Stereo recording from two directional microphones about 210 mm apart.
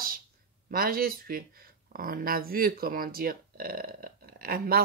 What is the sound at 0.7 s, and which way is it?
Speech, 45° right (ahead or behind).